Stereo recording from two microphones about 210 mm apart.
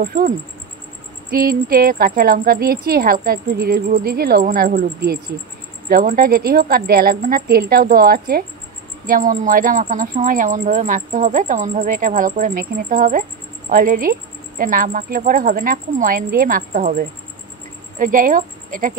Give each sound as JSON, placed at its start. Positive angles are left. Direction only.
{"t": 0.0, "sound": "speech", "side_deg": -40}
{"t": 1.3, "sound": "speech", "side_deg": -45}
{"t": 17.9, "sound": "a woman's voice", "side_deg": -40}